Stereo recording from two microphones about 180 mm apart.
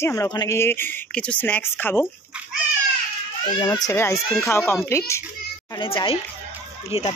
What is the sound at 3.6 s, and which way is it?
Speech, 20° left (ahead or behind).